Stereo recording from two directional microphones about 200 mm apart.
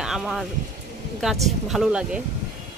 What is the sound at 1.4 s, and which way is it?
Speech, centre (ahead or behind).